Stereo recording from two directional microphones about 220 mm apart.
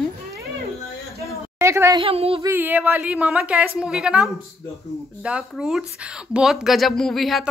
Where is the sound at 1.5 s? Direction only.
10° right (ahead or behind).